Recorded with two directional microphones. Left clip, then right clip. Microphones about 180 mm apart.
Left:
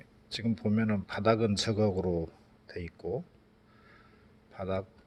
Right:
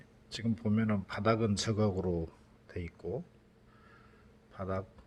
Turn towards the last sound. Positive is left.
turn(degrees=15)  # may be behind; listen again after turning